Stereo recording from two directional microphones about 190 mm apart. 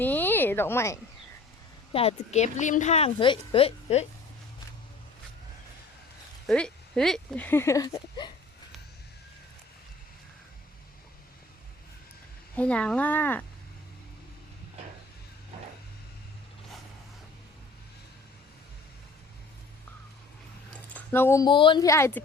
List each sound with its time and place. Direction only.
0.0 s a sound: 10° left (ahead or behind)
1.9 s a woman's voice: 30° left (ahead or behind)
6.5 s speech: 5° left (ahead or behind); by 8.3 s 25° left (ahead or behind)
12.5 s speech: 5° left (ahead or behind)
20.9 s speech: 10° left (ahead or behind)